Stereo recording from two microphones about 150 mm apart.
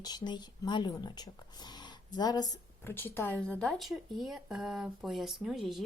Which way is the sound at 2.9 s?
15° left (ahead or behind).